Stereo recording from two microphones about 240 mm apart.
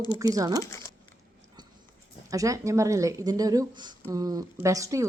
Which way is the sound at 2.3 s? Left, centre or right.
Centre.